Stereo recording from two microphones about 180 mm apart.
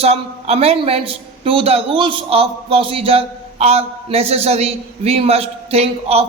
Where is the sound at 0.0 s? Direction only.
35° right (ahead or behind).